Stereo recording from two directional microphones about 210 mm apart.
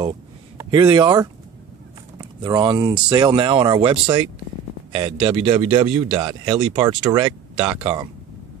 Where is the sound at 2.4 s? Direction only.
20° right (ahead or behind).